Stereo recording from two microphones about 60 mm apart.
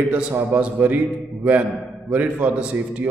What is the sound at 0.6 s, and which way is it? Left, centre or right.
A man's voice, right.